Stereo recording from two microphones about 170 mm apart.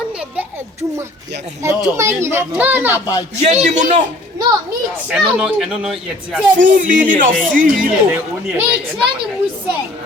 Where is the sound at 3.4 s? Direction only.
40° right (ahead or behind).